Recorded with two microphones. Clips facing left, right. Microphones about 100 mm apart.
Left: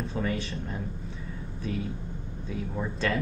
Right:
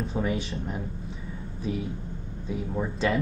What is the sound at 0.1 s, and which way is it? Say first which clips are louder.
Speech: right 2 dB; 15° right (ahead or behind).